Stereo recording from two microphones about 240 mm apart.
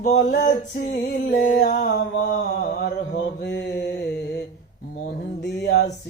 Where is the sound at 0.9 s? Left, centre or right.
Left.